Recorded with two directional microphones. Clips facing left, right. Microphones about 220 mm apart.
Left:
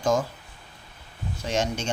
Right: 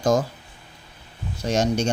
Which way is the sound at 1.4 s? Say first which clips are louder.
Right 6 dB; 40° right (ahead or behind).